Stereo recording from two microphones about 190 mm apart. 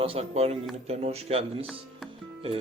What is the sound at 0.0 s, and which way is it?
Speech, 30° right (ahead or behind).